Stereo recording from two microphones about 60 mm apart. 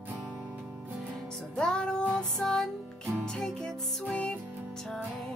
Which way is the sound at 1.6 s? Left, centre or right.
Centre.